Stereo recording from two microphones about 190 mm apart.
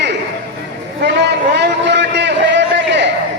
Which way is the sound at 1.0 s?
60° right (ahead or behind).